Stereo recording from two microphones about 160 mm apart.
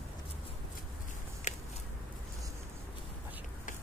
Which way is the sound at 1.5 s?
45° left (ahead or behind).